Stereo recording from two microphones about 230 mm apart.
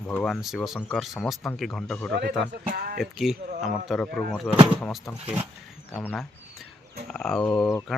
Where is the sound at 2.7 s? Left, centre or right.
Right.